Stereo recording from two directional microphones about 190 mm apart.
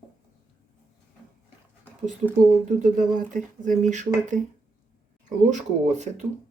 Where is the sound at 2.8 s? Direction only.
45° right (ahead or behind).